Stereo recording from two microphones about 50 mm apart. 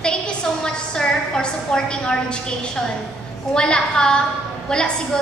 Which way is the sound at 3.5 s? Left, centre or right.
Centre.